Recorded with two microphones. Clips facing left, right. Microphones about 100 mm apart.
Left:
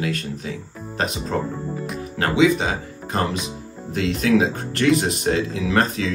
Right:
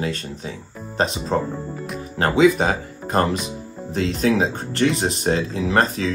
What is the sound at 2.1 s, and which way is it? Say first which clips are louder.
Speech: right 2 dB; 40° right (ahead or behind).